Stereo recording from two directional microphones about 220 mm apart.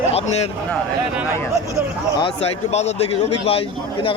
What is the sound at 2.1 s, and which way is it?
A man's voice, 25° left (ahead or behind).